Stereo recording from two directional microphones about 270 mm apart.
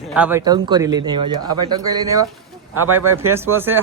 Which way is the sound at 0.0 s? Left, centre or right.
Centre.